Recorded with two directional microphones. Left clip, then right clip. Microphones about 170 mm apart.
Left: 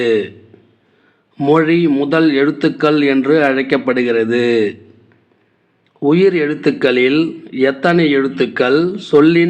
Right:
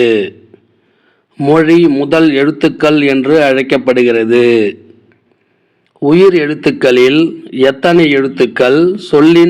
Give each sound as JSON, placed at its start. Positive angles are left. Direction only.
{"t": 0.0, "sound": "a man's voice", "side_deg": -35}
{"t": 1.4, "sound": "a man's voice", "side_deg": -35}
{"t": 6.0, "sound": "a man's voice", "side_deg": -35}